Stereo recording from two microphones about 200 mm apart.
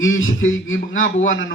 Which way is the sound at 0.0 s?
75° left (ahead or behind).